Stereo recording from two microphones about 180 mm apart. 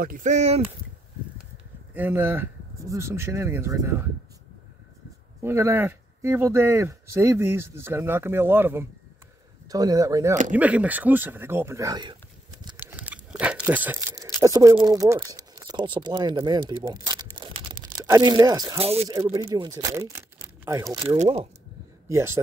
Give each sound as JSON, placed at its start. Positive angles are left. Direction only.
{"t": 0.0, "sound": "speech", "side_deg": -45}
{"t": 2.0, "sound": "speech", "side_deg": -10}
{"t": 5.4, "sound": "speech", "side_deg": -15}
{"t": 10.5, "sound": "speech", "side_deg": -10}
{"t": 12.7, "sound": "a sound", "side_deg": -10}
{"t": 18.8, "sound": "speech", "side_deg": -35}
{"t": 19.0, "sound": "speech", "side_deg": -20}
{"t": 21.0, "sound": "speech", "side_deg": -30}
{"t": 22.1, "sound": "speech", "side_deg": -15}